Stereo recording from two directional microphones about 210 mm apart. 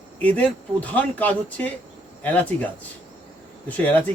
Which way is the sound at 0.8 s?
5° left (ahead or behind).